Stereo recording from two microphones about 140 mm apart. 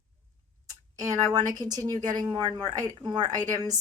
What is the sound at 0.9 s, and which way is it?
Speech, 25° right (ahead or behind).